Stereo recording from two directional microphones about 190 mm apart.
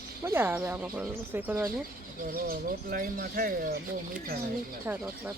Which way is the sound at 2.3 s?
50° right (ahead or behind).